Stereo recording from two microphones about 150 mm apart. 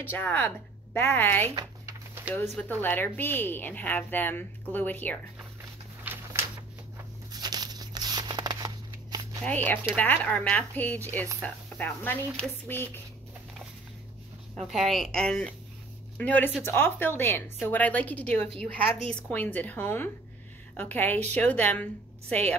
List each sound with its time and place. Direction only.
0.1 s a woman's voice: 10° left (ahead or behind)
2.5 s a woman's voice: 10° left (ahead or behind)
6.1 s a sound: 10° right (ahead or behind)
7.3 s a sound: 25° right (ahead or behind)
9.4 s a woman's voice: 10° left (ahead or behind)
14.6 s a woman's voice: centre (ahead or behind)